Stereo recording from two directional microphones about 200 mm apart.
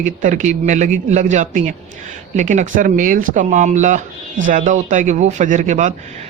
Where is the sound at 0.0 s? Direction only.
40° right (ahead or behind).